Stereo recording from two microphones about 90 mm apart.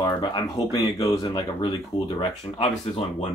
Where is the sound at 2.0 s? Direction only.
60° left (ahead or behind).